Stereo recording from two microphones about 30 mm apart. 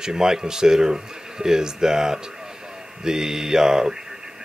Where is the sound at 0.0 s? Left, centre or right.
Right.